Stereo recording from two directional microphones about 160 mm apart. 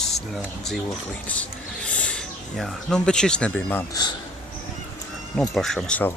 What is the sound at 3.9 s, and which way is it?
Speech, 25° left (ahead or behind).